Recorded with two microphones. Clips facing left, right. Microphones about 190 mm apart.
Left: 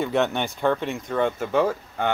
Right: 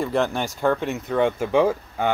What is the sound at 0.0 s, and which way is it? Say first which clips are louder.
Speech: even; centre (ahead or behind).